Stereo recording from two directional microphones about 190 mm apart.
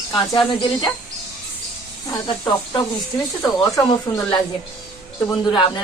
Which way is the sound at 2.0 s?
20° left (ahead or behind).